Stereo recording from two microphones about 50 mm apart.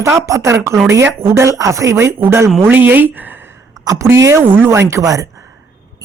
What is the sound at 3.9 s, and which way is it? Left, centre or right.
Speech, right.